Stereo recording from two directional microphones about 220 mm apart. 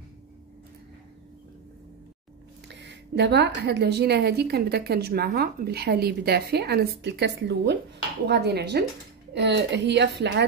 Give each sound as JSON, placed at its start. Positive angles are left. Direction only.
{"t": 2.7, "sound": "a woman's voice", "side_deg": -50}